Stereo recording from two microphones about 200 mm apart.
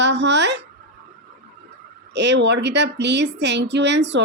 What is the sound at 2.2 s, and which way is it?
Speech, 60° right (ahead or behind).